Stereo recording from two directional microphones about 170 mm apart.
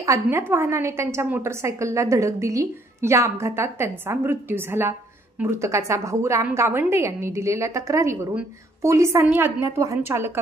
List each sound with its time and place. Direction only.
0.0 s a woman's voice: 15° right (ahead or behind)